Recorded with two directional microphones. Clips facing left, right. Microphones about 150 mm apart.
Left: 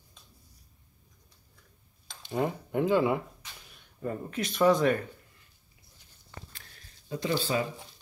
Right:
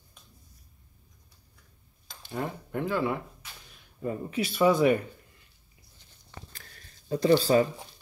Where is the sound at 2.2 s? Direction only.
15° left (ahead or behind).